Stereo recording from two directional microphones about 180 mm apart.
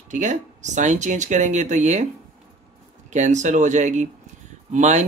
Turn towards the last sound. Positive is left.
turn(degrees=-40)  # may be behind; listen again after turning